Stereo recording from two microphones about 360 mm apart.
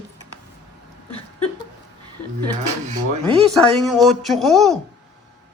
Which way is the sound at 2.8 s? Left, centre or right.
Centre.